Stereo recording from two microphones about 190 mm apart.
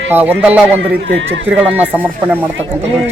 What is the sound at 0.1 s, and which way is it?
Speech, 10° right (ahead or behind).